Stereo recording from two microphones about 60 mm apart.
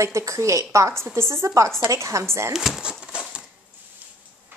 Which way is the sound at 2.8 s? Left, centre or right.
Centre.